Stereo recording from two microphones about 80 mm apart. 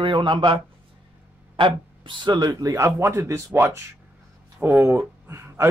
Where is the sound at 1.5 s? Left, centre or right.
Right.